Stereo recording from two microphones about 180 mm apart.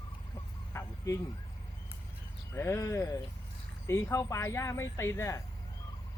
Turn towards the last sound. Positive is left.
turn(degrees=15)  # may be behind; listen again after turning